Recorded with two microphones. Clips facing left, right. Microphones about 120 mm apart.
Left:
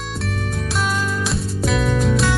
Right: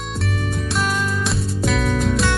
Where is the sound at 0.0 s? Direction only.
Centre (ahead or behind).